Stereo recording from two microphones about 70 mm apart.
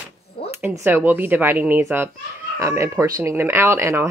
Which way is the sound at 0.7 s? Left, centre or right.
Right.